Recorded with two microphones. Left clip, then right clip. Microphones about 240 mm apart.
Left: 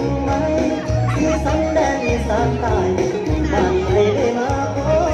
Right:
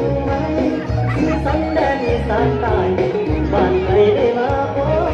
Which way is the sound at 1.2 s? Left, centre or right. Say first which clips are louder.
Left 1 dB; left.